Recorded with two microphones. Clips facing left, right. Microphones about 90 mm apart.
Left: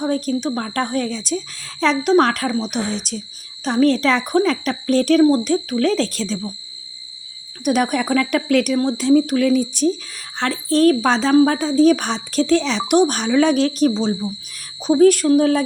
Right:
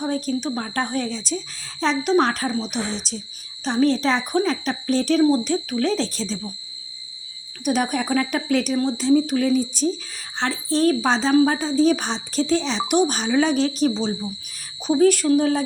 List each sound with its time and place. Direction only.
0.0 s a woman's voice: 45° left (ahead or behind)
7.6 s speech: 55° left (ahead or behind)
13.9 s cricket: 40° left (ahead or behind)
14.8 s a woman's voice: 45° left (ahead or behind)